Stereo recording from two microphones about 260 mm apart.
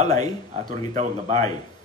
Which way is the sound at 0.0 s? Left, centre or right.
Centre.